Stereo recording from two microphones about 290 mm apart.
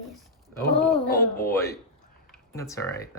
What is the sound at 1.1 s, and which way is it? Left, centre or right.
Speech, left.